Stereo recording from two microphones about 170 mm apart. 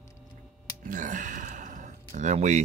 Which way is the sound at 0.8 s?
50° right (ahead or behind).